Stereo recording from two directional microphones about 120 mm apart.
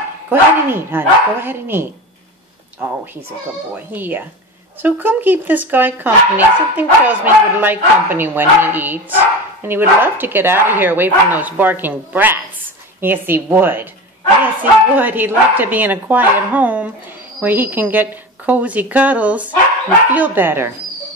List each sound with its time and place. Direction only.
0.3 s speech: 20° right (ahead or behind)
3.7 s speech: 15° right (ahead or behind)